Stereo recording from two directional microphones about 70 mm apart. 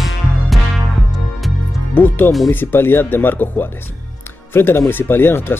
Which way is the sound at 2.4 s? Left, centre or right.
Left.